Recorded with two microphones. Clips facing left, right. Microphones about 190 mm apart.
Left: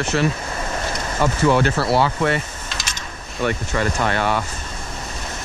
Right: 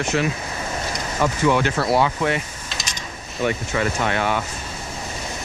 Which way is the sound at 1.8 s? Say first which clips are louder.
Left 1 dB; centre (ahead or behind).